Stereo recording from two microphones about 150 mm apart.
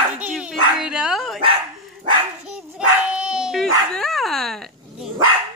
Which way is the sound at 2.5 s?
5° right (ahead or behind).